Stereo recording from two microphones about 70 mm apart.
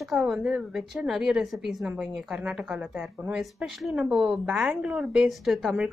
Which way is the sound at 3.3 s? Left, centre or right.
Centre.